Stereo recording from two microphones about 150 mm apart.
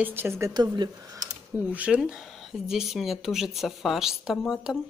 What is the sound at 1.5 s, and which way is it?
Speech, 10° right (ahead or behind).